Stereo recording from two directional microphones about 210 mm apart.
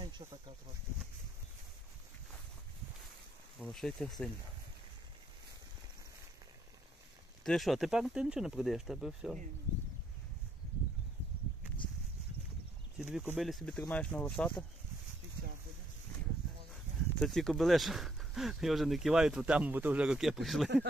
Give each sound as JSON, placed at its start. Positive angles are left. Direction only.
{"t": 0.0, "sound": "speech", "side_deg": -25}
{"t": 3.5, "sound": "speech", "side_deg": 5}
{"t": 7.4, "sound": "speech", "side_deg": 0}
{"t": 12.9, "sound": "speech", "side_deg": -5}
{"t": 17.2, "sound": "speech", "side_deg": 0}